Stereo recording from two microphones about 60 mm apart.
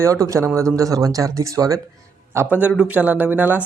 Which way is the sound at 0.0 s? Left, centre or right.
Right.